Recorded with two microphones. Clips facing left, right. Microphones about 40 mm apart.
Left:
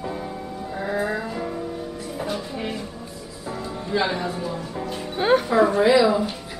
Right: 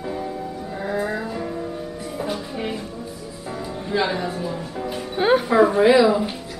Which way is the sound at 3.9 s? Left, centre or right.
Centre.